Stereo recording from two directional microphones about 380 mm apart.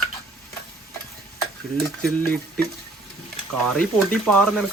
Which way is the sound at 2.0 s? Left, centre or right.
Centre.